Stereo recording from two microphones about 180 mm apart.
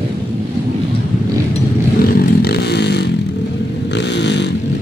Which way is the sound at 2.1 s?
60° left (ahead or behind).